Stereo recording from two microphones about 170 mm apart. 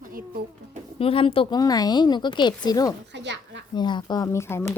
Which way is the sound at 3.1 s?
90° right.